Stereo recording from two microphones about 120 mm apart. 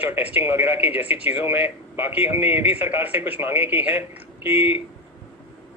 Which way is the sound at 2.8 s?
15° right (ahead or behind).